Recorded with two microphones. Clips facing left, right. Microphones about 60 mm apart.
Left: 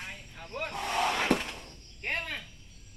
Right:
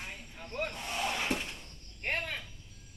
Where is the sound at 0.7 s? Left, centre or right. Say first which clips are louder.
Left 6 dB; left.